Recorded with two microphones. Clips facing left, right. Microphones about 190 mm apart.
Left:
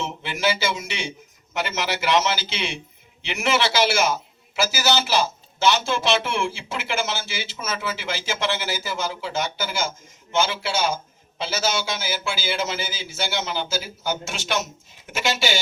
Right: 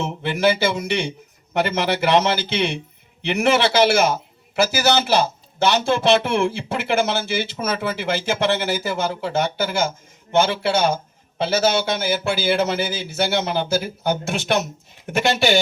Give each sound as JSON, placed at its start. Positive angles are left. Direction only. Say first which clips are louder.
{"t": 0.0, "sound": "a man's voice", "louder": "right 6 dB", "side_deg": -60}